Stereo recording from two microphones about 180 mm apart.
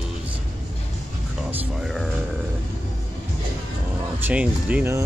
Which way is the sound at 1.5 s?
Centre (ahead or behind).